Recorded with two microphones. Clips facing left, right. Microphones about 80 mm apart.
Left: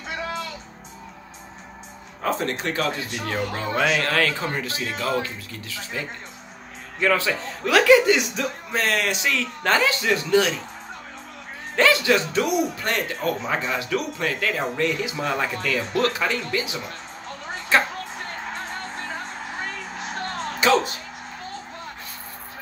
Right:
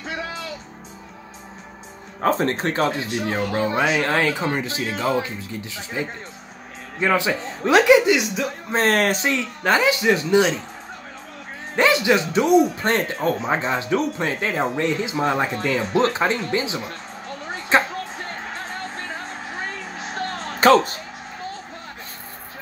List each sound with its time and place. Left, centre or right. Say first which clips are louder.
2.2 s speech: right 5 dB; right; by 8.2 s centre
8.7 s speech: right 5 dB; right
9.6 s speech: right 3 dB; centre
11.7 s speech: right 1 dB; right
17.7 s a sound: right 2 dB; right
20.6 s speech: right 5 dB; right